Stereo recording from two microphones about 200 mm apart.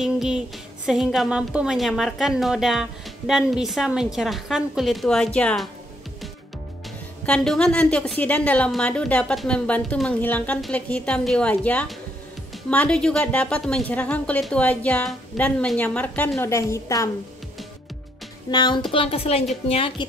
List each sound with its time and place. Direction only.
0.0 s music: 5° right (ahead or behind)
0.8 s a woman's voice: centre (ahead or behind)
7.2 s a woman's voice: 5° left (ahead or behind)
18.5 s a woman's voice: 20° left (ahead or behind)